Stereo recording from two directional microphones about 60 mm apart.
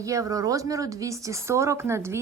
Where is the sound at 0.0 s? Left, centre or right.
Right.